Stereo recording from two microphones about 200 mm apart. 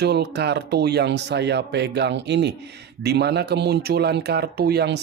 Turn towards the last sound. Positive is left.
turn(degrees=-55)  # may be behind; listen again after turning